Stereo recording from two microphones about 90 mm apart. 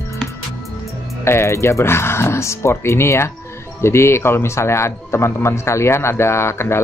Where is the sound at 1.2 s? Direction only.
30° left (ahead or behind).